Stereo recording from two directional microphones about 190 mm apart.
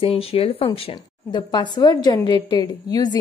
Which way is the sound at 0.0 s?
30° left (ahead or behind).